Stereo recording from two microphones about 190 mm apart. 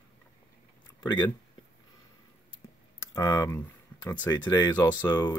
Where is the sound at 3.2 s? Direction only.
20° left (ahead or behind).